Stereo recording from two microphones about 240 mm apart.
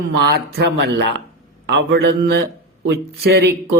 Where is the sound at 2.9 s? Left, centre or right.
Right.